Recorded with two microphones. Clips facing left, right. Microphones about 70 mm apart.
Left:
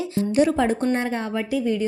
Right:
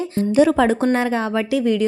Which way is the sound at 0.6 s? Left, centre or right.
Right.